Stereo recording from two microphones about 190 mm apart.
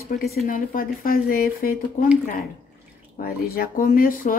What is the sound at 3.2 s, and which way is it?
A woman's voice, 50° left (ahead or behind).